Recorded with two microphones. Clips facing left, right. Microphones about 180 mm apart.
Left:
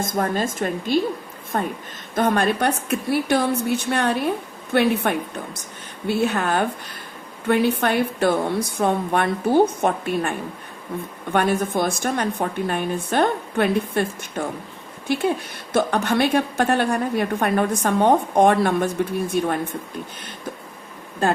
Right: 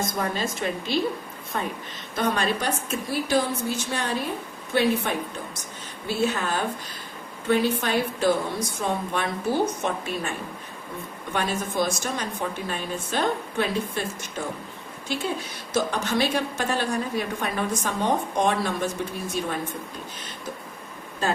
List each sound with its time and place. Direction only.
0.0 s a woman's voice: 50° left (ahead or behind)
21.2 s speech: 50° left (ahead or behind)